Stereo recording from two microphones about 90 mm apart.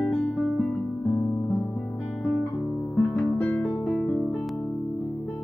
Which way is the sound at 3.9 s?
10° left (ahead or behind).